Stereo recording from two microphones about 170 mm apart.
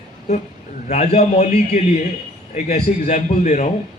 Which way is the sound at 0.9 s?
40° left (ahead or behind).